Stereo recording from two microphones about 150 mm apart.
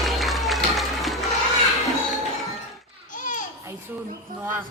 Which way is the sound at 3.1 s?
60° left (ahead or behind).